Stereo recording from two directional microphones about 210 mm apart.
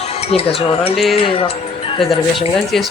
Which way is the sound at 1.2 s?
25° left (ahead or behind).